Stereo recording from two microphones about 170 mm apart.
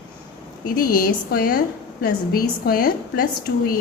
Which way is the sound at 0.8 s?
60° left (ahead or behind).